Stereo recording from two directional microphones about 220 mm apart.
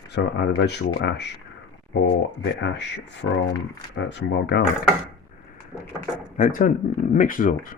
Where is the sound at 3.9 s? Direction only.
55° left (ahead or behind).